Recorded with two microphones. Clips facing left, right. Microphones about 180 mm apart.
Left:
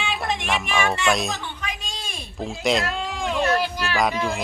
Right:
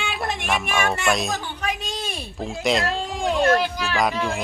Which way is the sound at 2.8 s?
35° right (ahead or behind).